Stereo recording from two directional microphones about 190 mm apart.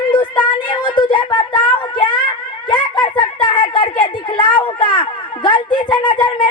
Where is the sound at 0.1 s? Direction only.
25° left (ahead or behind).